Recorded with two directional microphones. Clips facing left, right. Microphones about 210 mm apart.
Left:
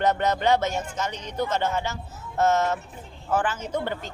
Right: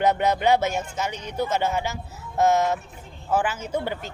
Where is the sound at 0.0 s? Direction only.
10° right (ahead or behind).